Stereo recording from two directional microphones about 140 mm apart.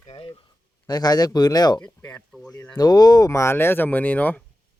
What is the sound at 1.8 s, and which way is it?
Speech, 10° left (ahead or behind).